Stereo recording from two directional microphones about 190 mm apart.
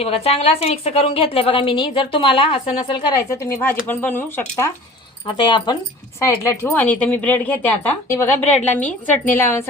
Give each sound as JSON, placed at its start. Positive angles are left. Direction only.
{"t": 0.0, "sound": "a woman's voice", "side_deg": 30}
{"t": 3.2, "sound": "a woman's voice", "side_deg": 15}
{"t": 5.2, "sound": "a woman's voice", "side_deg": 25}